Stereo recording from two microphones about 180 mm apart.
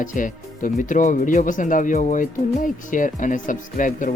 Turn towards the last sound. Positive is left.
turn(degrees=45)  # may be behind; listen again after turning